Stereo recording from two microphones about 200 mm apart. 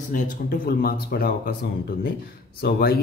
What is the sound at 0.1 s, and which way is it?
Speech, 40° left (ahead or behind).